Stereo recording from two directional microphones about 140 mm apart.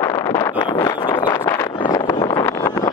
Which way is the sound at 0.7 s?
30° left (ahead or behind).